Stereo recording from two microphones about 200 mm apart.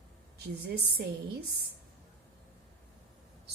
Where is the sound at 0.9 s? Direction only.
55° right (ahead or behind).